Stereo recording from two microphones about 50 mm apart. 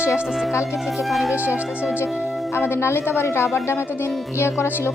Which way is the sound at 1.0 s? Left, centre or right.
Centre.